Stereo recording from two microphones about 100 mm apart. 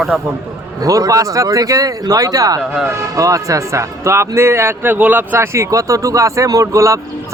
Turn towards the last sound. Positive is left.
turn(degrees=-30)  # may be behind; listen again after turning